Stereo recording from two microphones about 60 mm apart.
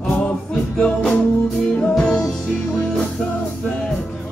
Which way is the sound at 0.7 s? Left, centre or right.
Centre.